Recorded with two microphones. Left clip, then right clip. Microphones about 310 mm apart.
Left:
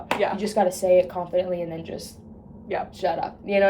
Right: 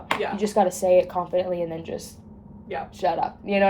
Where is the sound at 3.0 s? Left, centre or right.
Right.